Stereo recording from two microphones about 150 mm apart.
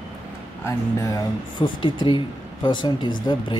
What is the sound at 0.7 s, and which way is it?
Speech, 20° left (ahead or behind).